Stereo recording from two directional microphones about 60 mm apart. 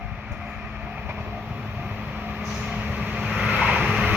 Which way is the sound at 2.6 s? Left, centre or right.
Right.